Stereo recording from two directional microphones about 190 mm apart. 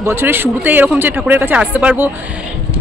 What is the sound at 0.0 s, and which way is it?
Speech, 10° right (ahead or behind).